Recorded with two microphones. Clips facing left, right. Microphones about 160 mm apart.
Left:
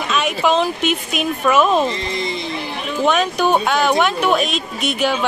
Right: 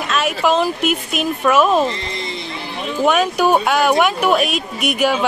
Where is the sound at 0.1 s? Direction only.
Centre (ahead or behind).